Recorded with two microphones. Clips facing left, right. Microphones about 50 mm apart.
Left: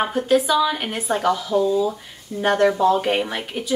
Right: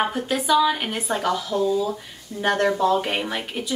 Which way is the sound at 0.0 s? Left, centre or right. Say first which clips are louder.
Left 5 dB; centre.